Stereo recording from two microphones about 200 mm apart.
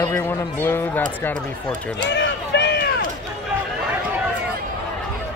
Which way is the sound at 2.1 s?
60° left (ahead or behind).